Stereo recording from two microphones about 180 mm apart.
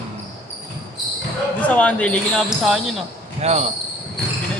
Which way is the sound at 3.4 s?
35° right (ahead or behind).